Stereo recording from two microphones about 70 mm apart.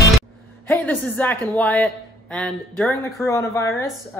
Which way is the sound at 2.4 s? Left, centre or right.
Centre.